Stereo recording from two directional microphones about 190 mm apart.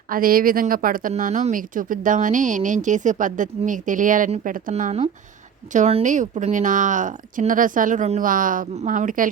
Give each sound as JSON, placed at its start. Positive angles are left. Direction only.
{"t": 0.1, "sound": "speech", "side_deg": -50}